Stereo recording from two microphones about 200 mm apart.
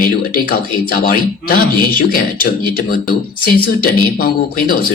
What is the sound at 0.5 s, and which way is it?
Speech, 50° left (ahead or behind).